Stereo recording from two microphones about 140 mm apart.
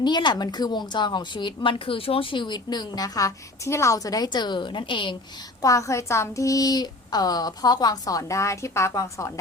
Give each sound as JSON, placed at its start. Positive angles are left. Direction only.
{"t": 0.0, "sound": "a woman's voice", "side_deg": 35}
{"t": 5.6, "sound": "a woman's voice", "side_deg": 25}